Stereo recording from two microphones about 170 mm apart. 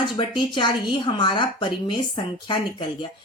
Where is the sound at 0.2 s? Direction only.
30° left (ahead or behind).